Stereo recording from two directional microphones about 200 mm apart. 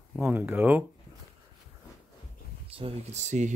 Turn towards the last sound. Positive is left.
turn(degrees=-35)  # may be behind; listen again after turning